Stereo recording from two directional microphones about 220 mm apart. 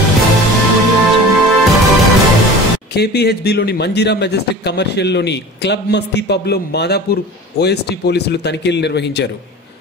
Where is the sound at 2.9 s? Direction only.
45° left (ahead or behind).